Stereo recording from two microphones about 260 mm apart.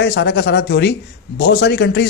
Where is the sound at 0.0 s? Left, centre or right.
Left.